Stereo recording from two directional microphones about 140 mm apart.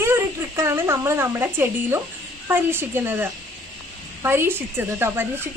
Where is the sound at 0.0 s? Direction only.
20° right (ahead or behind).